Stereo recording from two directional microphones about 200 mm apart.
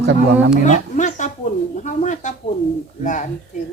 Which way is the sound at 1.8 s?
35° left (ahead or behind).